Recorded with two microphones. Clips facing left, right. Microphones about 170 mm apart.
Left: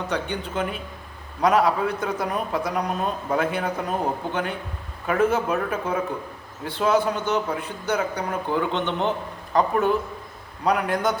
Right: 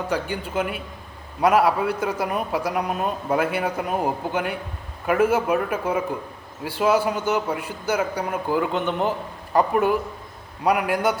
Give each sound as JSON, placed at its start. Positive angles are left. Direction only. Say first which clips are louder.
{"t": 0.1, "sound": "speech", "louder": "right 2 dB", "side_deg": -5}